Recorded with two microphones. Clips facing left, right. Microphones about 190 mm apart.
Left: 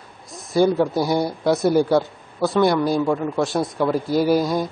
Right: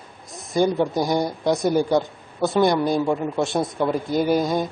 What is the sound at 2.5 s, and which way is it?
Speech, 20° right (ahead or behind).